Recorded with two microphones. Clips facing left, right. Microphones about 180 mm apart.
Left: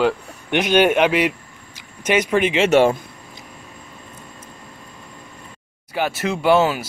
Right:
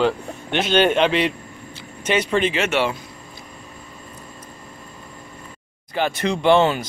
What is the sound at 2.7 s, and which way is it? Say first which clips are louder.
Speech: left 7 dB; 45° left (ahead or behind).